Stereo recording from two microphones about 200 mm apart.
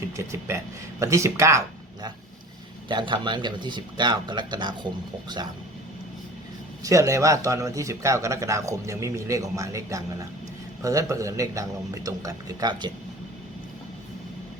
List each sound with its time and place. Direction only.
0.2 s a man's voice: 15° right (ahead or behind)
6.8 s speech: 15° right (ahead or behind)